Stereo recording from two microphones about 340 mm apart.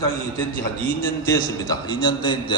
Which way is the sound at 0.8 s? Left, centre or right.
Centre.